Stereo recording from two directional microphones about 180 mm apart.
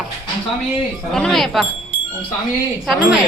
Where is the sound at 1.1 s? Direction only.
Centre (ahead or behind).